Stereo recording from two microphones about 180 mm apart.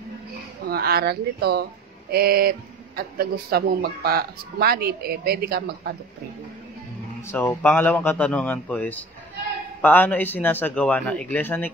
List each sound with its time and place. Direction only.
0.7 s speech: 60° right (ahead or behind)
7.2 s a man's voice: 15° left (ahead or behind)